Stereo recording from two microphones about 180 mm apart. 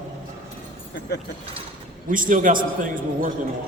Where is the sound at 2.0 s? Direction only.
50° right (ahead or behind).